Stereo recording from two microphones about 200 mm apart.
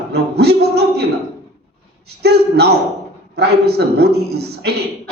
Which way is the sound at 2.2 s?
55° right (ahead or behind).